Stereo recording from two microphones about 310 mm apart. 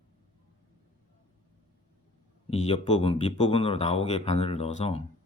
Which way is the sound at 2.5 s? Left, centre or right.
Left.